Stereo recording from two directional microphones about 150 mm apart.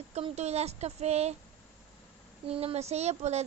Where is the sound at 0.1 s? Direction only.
45° right (ahead or behind).